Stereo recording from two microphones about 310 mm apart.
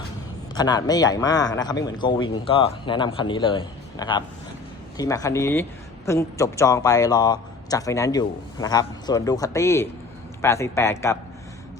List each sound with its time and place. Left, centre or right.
0.5 s a man's voice: centre